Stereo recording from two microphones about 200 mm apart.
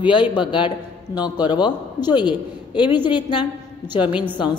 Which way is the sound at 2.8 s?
10° right (ahead or behind).